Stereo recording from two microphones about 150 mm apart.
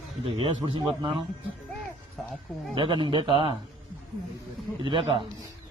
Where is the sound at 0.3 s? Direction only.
35° right (ahead or behind).